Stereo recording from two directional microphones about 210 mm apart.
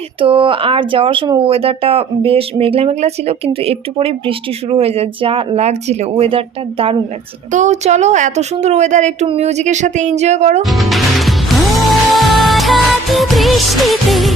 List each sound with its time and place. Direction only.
0.2 s a woman's voice: 25° right (ahead or behind)
10.6 s music: centre (ahead or behind)